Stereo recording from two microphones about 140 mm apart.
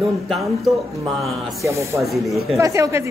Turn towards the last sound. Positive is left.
turn(degrees=-20)  # may be behind; listen again after turning